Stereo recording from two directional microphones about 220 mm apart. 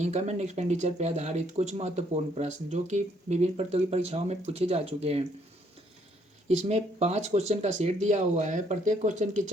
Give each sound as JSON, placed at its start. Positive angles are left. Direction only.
{"t": 0.0, "sound": "speech", "side_deg": -30}
{"t": 6.7, "sound": "speech", "side_deg": -30}